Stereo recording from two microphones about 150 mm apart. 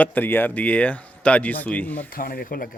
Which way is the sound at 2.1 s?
75° left (ahead or behind).